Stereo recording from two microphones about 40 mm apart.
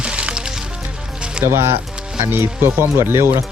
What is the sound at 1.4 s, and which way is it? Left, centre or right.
Speech, right.